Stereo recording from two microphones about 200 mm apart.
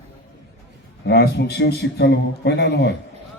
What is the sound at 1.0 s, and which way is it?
A man's voice, 55° left (ahead or behind).